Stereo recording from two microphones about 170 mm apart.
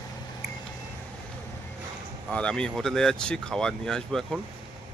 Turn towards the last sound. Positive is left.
turn(degrees=5)  # may be behind; listen again after turning